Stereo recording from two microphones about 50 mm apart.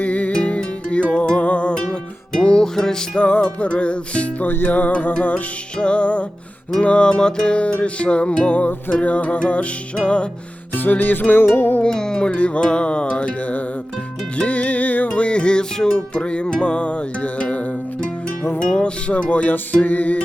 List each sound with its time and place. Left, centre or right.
0.0 s music: left; by 3.0 s centre
3.2 s music: left
4.4 s music: left
10.8 s music: left
11.8 s music: centre; by 20.2 s left